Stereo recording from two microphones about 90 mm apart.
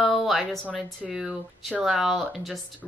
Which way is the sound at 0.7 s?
10° right (ahead or behind).